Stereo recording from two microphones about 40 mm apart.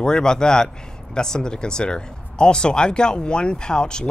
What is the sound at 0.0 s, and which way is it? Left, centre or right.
Speech, centre.